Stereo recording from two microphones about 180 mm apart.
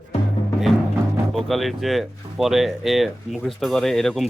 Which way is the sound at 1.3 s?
Centre (ahead or behind).